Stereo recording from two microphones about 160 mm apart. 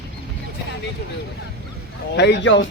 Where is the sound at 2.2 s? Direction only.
90° left.